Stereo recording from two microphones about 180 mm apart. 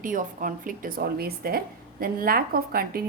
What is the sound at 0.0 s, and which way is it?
A woman's voice, 50° right (ahead or behind).